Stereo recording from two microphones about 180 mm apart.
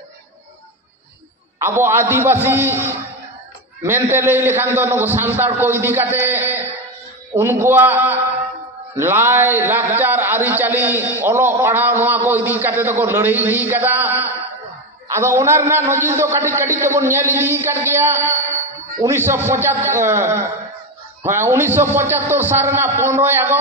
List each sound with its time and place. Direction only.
1.6 s a man's voice: 15° right (ahead or behind)